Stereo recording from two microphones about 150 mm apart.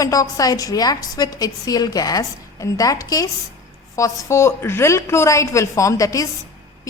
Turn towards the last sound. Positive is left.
turn(degrees=20)  # may be behind; listen again after turning